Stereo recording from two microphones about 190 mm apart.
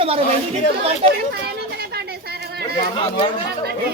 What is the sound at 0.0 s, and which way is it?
Speech, 30° right (ahead or behind).